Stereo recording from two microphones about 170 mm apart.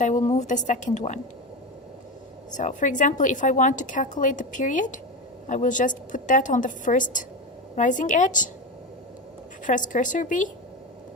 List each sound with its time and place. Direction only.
0.0 s a woman's voice: 45° left (ahead or behind)
2.5 s a woman's voice: 45° left (ahead or behind)
9.6 s a woman's voice: 50° left (ahead or behind)